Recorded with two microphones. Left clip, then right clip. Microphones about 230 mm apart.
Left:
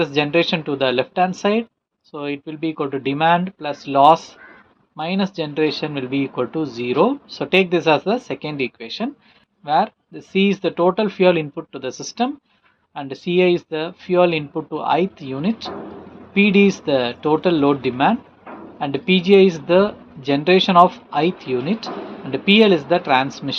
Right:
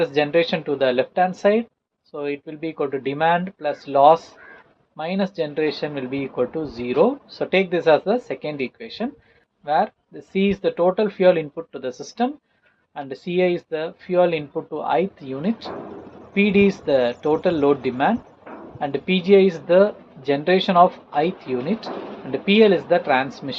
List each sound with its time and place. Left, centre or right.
0.0 s speech: left